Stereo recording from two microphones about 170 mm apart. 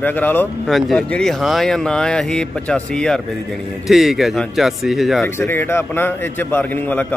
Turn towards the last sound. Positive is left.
turn(degrees=10)  # may be behind; listen again after turning